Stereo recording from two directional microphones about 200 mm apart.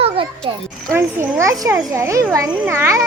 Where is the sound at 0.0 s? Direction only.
25° right (ahead or behind).